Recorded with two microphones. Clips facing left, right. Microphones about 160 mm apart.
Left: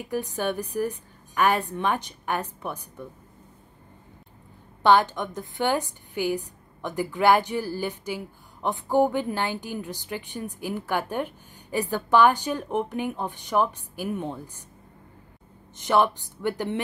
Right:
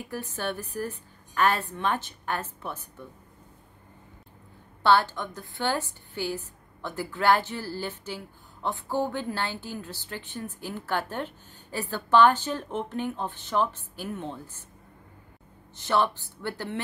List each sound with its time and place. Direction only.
0.1 s a woman's voice: 15° left (ahead or behind)
4.8 s a woman's voice: 15° left (ahead or behind)
15.7 s a woman's voice: 15° left (ahead or behind)